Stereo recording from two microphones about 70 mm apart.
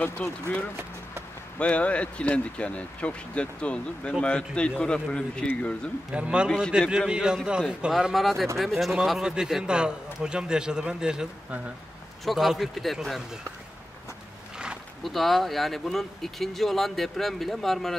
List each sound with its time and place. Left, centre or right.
0.0 s speech: centre
6.1 s a man's voice: centre
7.9 s a man's voice: centre
12.3 s speech: centre
15.0 s speech: centre